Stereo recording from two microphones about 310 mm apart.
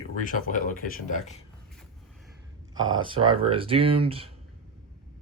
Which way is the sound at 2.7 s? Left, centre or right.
Right.